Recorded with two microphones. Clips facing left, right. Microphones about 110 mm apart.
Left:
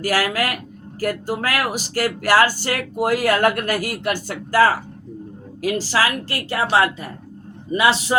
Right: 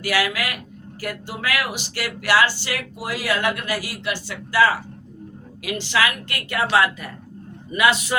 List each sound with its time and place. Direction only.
0.0 s a woman's voice: 40° left (ahead or behind)